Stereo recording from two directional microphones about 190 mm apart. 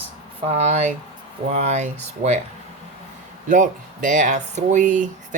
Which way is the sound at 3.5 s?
40° right (ahead or behind).